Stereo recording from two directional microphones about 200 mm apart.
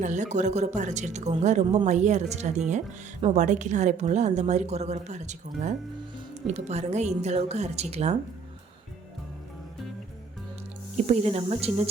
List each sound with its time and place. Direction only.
0.0 s a woman's voice: 35° right (ahead or behind)
10.9 s a woman's voice: 35° right (ahead or behind)